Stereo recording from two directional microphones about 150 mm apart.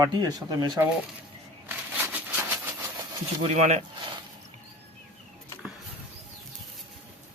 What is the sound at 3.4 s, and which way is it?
Speech, 45° right (ahead or behind).